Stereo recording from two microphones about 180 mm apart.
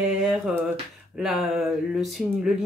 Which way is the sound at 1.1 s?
Centre (ahead or behind).